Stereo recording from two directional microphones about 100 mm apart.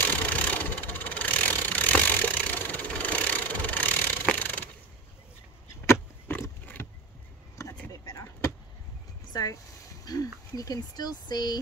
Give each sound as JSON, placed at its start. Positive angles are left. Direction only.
{"t": 0.0, "sound": "vehicle", "side_deg": 15}
{"t": 6.6, "sound": "a sound", "side_deg": 20}
{"t": 8.1, "sound": "vehicle", "side_deg": 30}
{"t": 9.3, "sound": "vehicle", "side_deg": 40}
{"t": 10.0, "sound": "speech", "side_deg": 40}